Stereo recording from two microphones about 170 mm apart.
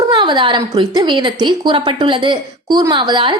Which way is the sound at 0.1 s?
30° right (ahead or behind).